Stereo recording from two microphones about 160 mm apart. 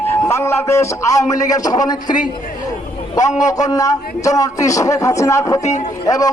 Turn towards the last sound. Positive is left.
turn(degrees=20)  # may be behind; listen again after turning